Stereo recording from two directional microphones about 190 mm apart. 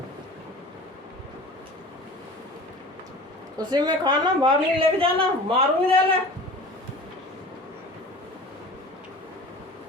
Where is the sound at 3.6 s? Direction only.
20° right (ahead or behind).